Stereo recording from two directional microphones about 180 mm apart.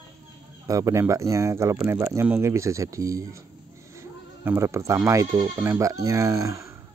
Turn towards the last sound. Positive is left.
turn(degrees=-15)  # may be behind; listen again after turning